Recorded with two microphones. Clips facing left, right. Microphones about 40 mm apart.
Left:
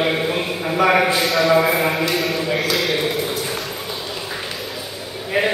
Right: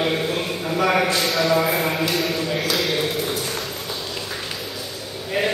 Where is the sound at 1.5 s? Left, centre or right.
Centre.